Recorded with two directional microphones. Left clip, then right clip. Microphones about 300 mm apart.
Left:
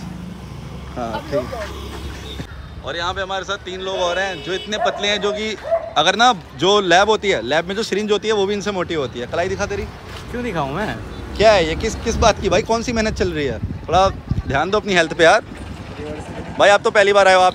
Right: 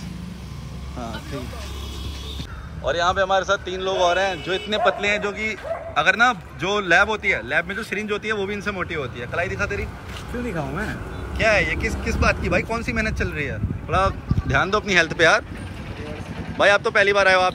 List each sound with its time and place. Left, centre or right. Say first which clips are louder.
0.9 s speech: left 10 dB; centre
2.8 s a man's voice: right 3 dB; centre
10.5 s speech: left 7 dB; left
11.3 s a man's voice: left 6 dB; centre
16.5 s a man's voice: left 4 dB; centre